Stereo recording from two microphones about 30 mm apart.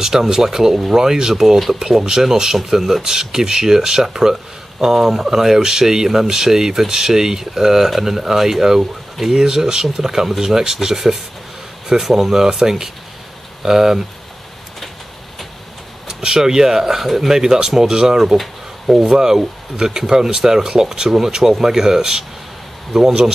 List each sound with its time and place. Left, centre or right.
0.0 s speech: centre
1.0 s speech: centre
16.1 s a sound: right
16.3 s speech: centre
17.3 s speech: right
18.4 s a sound: centre
19.0 s speech: centre